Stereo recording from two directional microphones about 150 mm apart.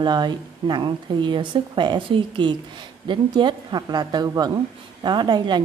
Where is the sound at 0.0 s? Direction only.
30° right (ahead or behind).